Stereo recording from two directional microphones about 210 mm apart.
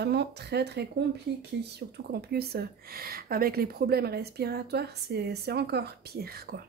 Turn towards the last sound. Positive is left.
turn(degrees=-45)  # may be behind; listen again after turning